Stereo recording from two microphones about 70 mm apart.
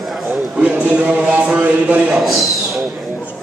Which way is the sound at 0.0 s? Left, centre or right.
Centre.